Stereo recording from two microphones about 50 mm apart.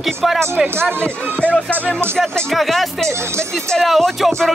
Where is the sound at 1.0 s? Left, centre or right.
Left.